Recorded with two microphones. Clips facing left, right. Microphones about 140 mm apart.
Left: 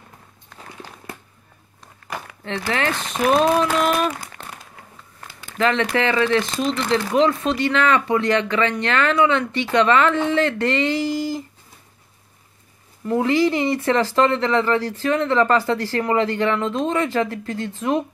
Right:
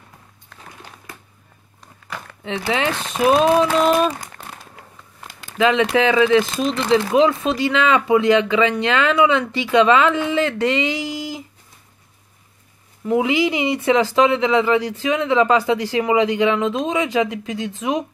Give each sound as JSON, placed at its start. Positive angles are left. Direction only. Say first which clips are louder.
{"t": 2.4, "sound": "speech", "louder": "right 2 dB", "side_deg": -10}
{"t": 5.6, "sound": "speech", "louder": "right 3 dB", "side_deg": -10}
{"t": 13.0, "sound": "speech", "louder": "even", "side_deg": -10}
{"t": 17.6, "sound": "speech", "louder": "even", "side_deg": 0}